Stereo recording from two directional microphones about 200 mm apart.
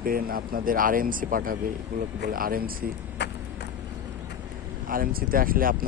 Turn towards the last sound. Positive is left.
turn(degrees=-45)  # may be behind; listen again after turning